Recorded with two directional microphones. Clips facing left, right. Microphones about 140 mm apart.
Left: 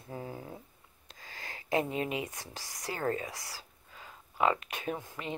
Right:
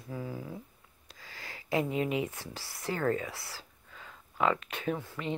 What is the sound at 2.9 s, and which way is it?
Speech, 25° left (ahead or behind).